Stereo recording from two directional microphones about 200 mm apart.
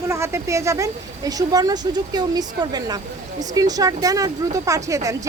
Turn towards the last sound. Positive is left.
turn(degrees=-15)  # may be behind; listen again after turning